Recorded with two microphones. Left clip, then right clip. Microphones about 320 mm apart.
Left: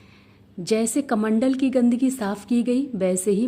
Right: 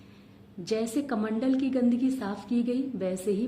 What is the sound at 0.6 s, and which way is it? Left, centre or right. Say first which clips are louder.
Speech: left 7 dB; left.